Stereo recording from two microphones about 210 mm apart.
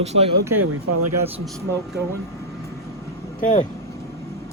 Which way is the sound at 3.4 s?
35° left (ahead or behind).